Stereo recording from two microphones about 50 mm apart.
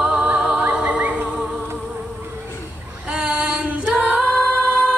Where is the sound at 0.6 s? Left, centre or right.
Right.